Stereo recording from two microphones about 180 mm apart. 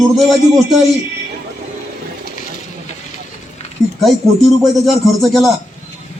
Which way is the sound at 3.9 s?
Centre (ahead or behind).